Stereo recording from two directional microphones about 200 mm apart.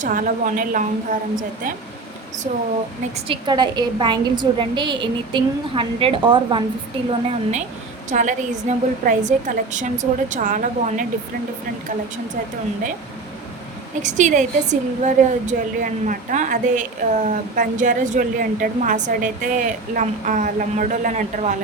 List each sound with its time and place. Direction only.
0.0 s a woman's voice: 40° right (ahead or behind)
3.2 s a woman's voice: 20° right (ahead or behind); by 11.0 s 40° right (ahead or behind)
14.0 s a woman's voice: 35° right (ahead or behind)